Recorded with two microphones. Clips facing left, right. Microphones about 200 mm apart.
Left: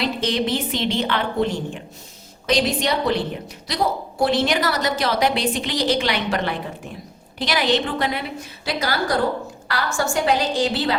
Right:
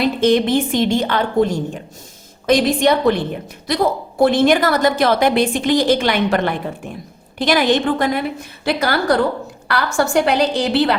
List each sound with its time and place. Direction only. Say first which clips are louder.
0.0 s a woman's voice: right 8 dB; 50° right (ahead or behind)